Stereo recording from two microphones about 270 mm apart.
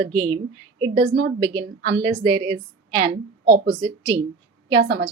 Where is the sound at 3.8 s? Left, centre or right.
Centre.